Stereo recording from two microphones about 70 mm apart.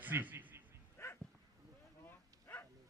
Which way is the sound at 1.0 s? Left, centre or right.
Left.